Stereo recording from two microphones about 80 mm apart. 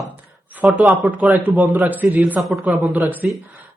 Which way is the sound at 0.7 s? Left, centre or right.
Centre.